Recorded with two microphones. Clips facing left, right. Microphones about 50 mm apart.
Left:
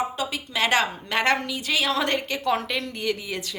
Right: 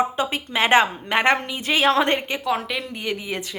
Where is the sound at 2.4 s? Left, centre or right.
Centre; by 3.6 s right.